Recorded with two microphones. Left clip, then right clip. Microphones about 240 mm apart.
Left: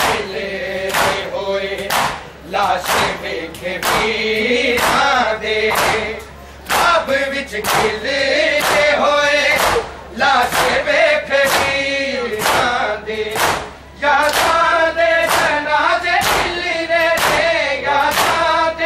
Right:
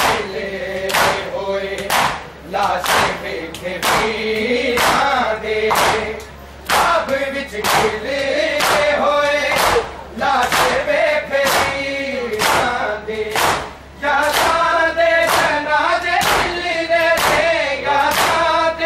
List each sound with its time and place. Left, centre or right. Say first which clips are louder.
0.9 s a sound: right 1 dB; centre
1.5 s a sound: even; centre
3.8 s choir: even; centre
4.7 s choir: even; centre
5.0 s a sound: left 2 dB; centre
8.1 s chant: left 3 dB; centre
10.2 s battle cry: left 3 dB; centre
10.5 s choir: left 1 dB; centre
16.9 s singing: even; centre